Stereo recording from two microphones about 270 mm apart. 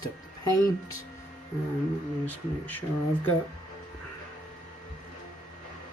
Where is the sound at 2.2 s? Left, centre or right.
Centre.